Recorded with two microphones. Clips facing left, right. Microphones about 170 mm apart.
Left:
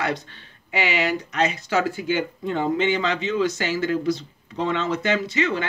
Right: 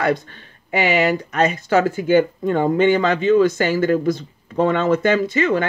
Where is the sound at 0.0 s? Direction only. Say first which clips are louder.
Right 7 dB; 50° right (ahead or behind).